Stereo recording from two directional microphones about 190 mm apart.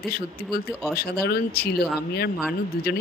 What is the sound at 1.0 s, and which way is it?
Speech, 55° left (ahead or behind).